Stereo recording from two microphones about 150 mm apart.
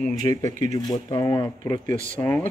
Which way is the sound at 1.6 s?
60° right (ahead or behind).